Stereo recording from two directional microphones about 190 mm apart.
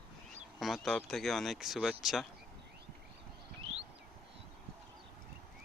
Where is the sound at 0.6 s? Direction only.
Centre (ahead or behind).